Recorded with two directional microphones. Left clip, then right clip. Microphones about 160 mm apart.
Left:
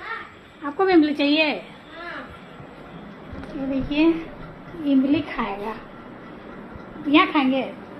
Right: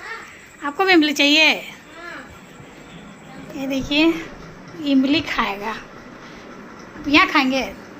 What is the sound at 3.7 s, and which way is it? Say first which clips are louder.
A woman's voice: right 3 dB; 20° right (ahead or behind).